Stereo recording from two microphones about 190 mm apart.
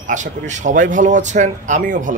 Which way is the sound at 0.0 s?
40° right (ahead or behind).